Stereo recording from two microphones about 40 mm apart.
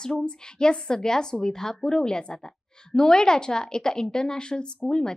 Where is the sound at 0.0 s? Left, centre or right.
Left.